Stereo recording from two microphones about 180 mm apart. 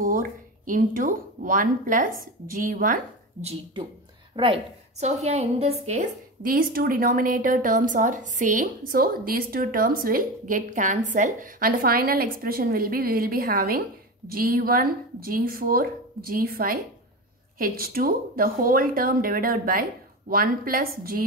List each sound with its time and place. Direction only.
0.0 s a woman's voice: 50° right (ahead or behind)
4.4 s a woman's voice: 25° right (ahead or behind)
5.0 s a woman's voice: 40° right (ahead or behind); by 21.2 s 55° right (ahead or behind)